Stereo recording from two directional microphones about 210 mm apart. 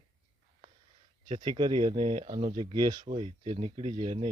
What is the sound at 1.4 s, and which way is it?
Speech, 20° right (ahead or behind).